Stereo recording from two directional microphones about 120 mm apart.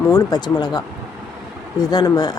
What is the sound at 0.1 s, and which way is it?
Speech, 35° left (ahead or behind).